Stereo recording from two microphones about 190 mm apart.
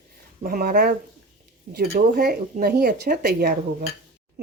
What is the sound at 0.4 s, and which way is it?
Speech, 50° right (ahead or behind).